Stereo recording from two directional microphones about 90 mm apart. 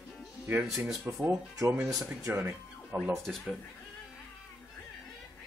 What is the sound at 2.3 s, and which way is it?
Music, 20° right (ahead or behind).